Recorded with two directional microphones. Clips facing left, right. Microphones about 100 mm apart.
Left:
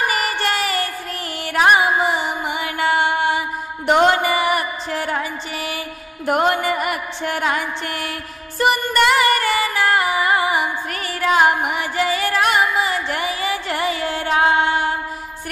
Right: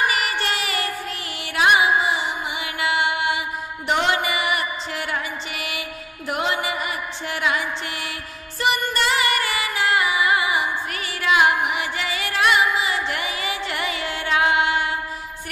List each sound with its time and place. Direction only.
0.0 s music: 40° left (ahead or behind)
6.2 s music: 45° left (ahead or behind)